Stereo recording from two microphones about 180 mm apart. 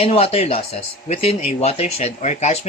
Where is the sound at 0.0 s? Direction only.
35° left (ahead or behind).